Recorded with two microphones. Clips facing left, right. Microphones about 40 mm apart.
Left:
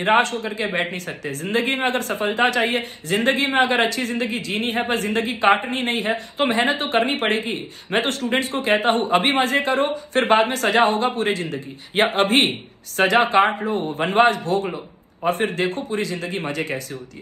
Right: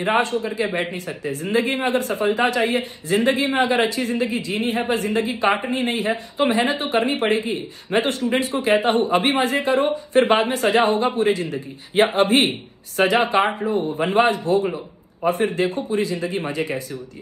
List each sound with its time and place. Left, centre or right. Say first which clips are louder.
0.2 s a man's voice: even; left
0.7 s speech: left 1 dB; left
0.9 s speech: right 1 dB; left
11.9 s speech: right 1 dB; left
13.6 s speech: right 1 dB; left